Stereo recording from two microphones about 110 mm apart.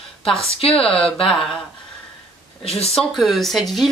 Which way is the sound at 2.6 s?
65° left (ahead or behind).